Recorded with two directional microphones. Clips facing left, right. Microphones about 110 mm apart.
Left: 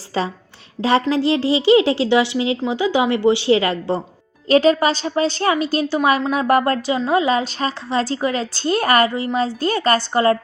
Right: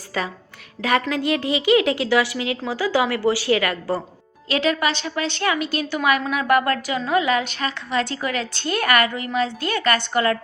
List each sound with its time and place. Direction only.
0.1 s a woman's voice: 30° left (ahead or behind)
4.4 s a woman's voice: 40° left (ahead or behind)